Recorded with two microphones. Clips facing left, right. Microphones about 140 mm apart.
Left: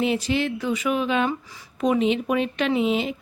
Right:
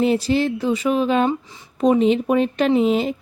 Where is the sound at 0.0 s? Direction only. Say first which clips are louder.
Right 5 dB; 35° right (ahead or behind).